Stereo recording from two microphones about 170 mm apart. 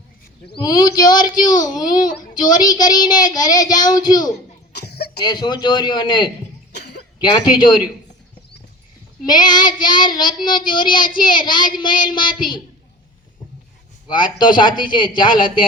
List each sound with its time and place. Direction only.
0.5 s a child's voice: 25° left (ahead or behind)
4.7 s cough: 75° left (ahead or behind)
5.2 s a child's voice: 25° left (ahead or behind)
6.7 s cough: 75° left (ahead or behind)
9.2 s a child's voice: 25° left (ahead or behind)
14.1 s a child's voice: 25° left (ahead or behind)